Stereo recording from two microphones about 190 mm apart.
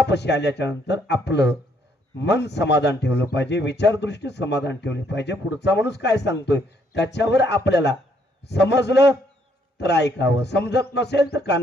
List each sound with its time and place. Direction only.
0.1 s a man's voice: 65° left (ahead or behind)